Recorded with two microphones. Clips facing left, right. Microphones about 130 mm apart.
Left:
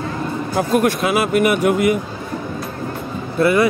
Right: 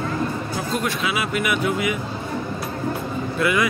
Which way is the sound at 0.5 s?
55° left (ahead or behind).